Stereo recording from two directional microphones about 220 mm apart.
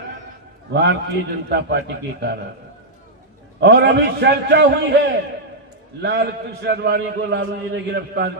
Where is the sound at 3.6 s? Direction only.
50° right (ahead or behind).